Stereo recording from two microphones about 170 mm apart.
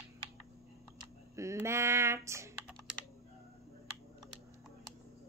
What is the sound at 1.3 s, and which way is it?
Speech, 15° right (ahead or behind).